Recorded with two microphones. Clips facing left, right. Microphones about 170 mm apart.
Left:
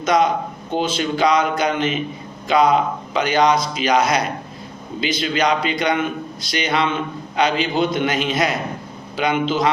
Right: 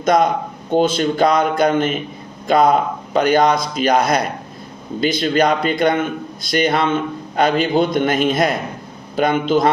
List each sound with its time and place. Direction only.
0.0 s speech: 50° right (ahead or behind)